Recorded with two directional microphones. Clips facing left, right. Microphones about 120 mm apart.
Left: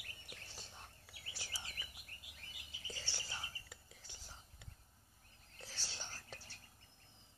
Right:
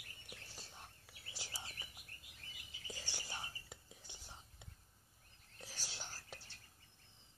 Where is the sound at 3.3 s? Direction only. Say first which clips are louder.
Right 1 dB; 20° right (ahead or behind).